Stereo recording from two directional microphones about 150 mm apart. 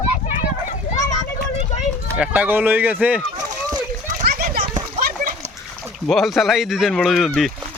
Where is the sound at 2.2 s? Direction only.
10° right (ahead or behind).